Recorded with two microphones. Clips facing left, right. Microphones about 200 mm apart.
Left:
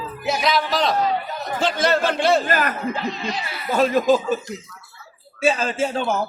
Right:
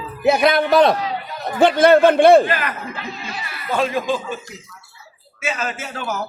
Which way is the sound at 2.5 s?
45° left (ahead or behind).